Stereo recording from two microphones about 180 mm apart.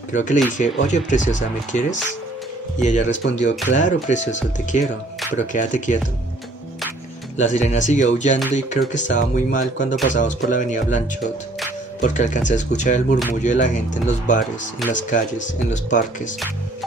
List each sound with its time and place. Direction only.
0.1 s speech: 45° left (ahead or behind)
2.8 s speech: 40° left (ahead or behind)
7.3 s speech: 40° left (ahead or behind)